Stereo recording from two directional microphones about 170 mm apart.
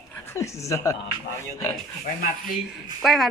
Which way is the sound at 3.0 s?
Centre (ahead or behind).